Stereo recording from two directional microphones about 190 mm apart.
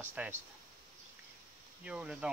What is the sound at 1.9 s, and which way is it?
Speech, 5° right (ahead or behind).